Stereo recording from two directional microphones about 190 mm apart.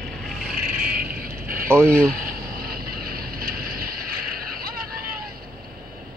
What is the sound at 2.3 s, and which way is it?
Vehicle, 50° right (ahead or behind).